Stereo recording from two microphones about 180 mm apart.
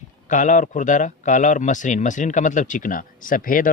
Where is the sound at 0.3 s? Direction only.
45° left (ahead or behind).